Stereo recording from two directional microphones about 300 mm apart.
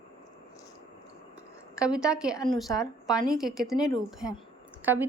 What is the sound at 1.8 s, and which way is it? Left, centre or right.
A woman's voice, centre.